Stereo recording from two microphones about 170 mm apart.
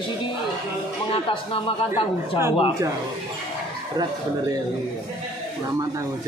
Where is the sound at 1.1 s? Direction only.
35° left (ahead or behind).